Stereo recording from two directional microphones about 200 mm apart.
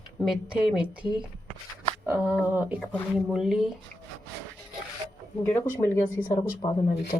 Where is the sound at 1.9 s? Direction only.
10° right (ahead or behind).